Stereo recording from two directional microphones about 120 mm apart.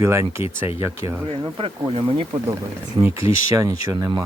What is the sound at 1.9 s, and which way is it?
Speech, 45° right (ahead or behind).